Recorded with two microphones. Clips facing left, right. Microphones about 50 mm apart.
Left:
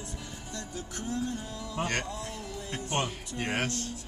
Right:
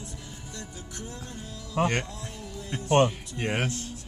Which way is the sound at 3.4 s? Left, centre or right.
Centre.